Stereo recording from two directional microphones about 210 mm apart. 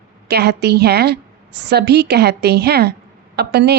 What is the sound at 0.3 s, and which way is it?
A woman's voice, 50° right (ahead or behind).